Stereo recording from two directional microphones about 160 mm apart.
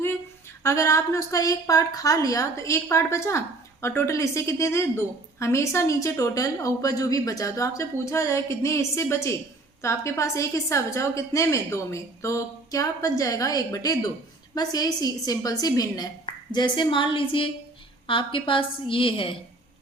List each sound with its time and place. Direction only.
0.6 s a woman's voice: 20° left (ahead or behind); by 19.4 s 35° left (ahead or behind)